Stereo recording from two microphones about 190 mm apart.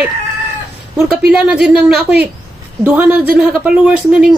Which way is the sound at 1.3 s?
5° right (ahead or behind).